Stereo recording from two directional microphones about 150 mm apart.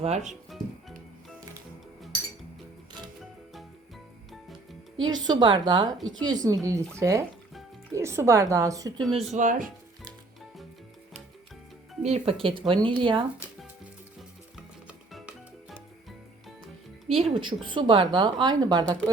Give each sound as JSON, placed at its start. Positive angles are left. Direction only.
{"t": 0.0, "sound": "speech", "side_deg": -50}
{"t": 5.0, "sound": "a woman's voice", "side_deg": -30}
{"t": 9.3, "sound": "speech", "side_deg": -60}
{"t": 12.0, "sound": "a woman's voice", "side_deg": -45}
{"t": 14.2, "sound": "music", "side_deg": 0}
{"t": 17.1, "sound": "a woman's voice", "side_deg": -40}